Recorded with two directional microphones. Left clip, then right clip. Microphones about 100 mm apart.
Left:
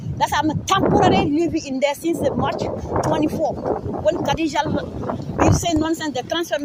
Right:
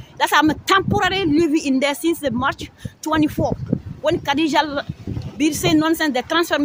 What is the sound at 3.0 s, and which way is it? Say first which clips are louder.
Speech: right 1 dB; 45° right (ahead or behind).